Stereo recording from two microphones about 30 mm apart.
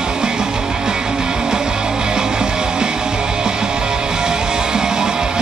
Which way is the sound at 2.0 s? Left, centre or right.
Right.